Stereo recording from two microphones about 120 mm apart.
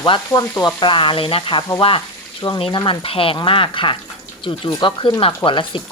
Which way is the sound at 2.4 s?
35° left (ahead or behind).